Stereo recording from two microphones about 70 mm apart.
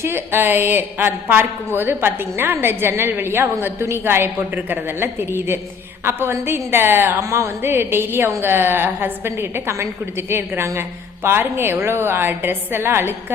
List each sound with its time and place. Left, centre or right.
0.0 s a woman's voice: right
7.2 s a woman's voice: right